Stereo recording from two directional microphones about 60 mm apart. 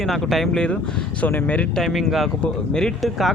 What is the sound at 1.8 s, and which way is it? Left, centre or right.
Speech, centre.